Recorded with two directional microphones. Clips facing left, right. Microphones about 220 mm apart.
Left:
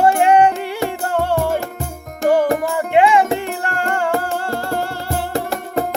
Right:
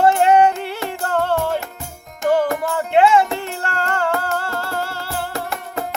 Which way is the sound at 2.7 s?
15° left (ahead or behind).